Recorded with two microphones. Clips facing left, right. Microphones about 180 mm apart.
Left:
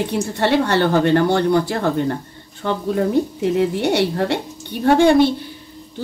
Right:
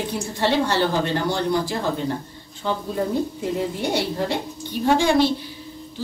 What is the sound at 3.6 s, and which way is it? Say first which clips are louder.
A woman's voice: left 7 dB; 70° left (ahead or behind).